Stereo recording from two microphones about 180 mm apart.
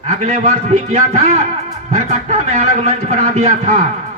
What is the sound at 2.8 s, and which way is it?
Speech, 35° right (ahead or behind).